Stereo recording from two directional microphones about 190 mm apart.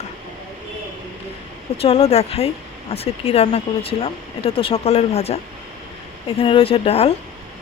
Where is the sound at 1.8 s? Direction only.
35° left (ahead or behind).